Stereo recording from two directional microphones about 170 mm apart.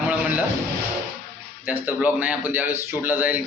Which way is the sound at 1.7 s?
10° right (ahead or behind).